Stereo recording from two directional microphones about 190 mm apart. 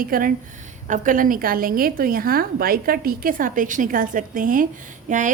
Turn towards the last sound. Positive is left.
turn(degrees=-40)  # may be behind; listen again after turning